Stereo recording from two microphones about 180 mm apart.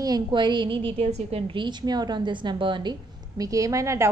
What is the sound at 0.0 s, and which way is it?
A woman's voice, 25° right (ahead or behind).